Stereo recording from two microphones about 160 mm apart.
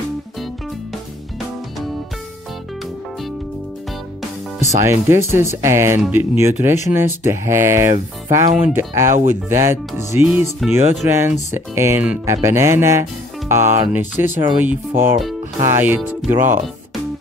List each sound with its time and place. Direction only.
4.7 s speech: 15° right (ahead or behind)
10.6 s music: centre (ahead or behind)
11.1 s speech: 15° right (ahead or behind)